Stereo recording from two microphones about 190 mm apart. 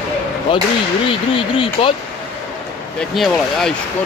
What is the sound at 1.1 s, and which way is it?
Speech, 30° left (ahead or behind).